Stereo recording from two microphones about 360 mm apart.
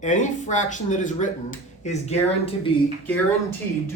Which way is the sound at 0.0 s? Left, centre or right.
Centre.